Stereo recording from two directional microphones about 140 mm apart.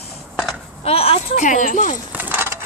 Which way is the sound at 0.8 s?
45° left (ahead or behind).